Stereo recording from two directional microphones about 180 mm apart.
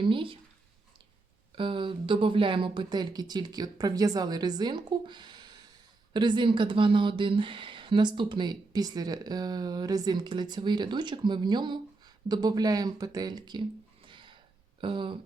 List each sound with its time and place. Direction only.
0.0 s speech: 30° right (ahead or behind)
1.5 s a woman's voice: 30° right (ahead or behind)